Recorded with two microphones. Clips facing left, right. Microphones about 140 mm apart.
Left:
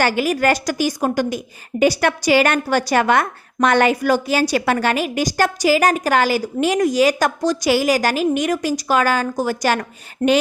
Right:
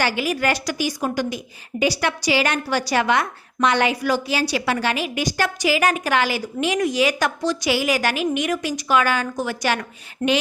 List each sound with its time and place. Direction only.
0.0 s a woman's voice: 45° left (ahead or behind)